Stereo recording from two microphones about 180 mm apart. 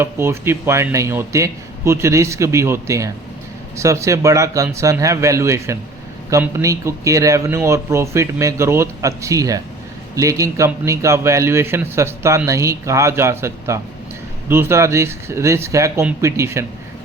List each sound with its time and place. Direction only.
0.0 s speech: 15° right (ahead or behind)